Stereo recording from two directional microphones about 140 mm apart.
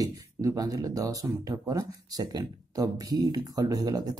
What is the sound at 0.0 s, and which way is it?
Speech, 25° right (ahead or behind).